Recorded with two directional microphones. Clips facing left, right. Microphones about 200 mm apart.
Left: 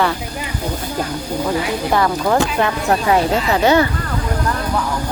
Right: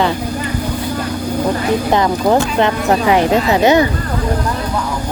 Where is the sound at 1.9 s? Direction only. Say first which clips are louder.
Right 2 dB; 20° right (ahead or behind).